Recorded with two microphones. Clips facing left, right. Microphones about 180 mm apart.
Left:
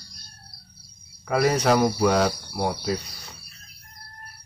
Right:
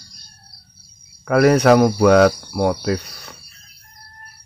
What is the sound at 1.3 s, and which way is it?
Speech, 60° right (ahead or behind).